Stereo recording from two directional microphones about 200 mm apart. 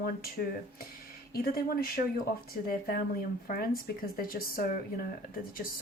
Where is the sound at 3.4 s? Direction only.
45° left (ahead or behind).